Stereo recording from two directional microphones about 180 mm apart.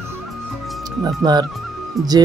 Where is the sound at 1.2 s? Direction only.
20° right (ahead or behind).